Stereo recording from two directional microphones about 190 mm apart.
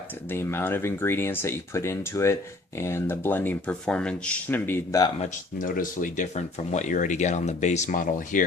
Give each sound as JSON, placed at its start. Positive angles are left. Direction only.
{"t": 0.3, "sound": "speech", "side_deg": 10}
{"t": 5.5, "sound": "speech", "side_deg": 45}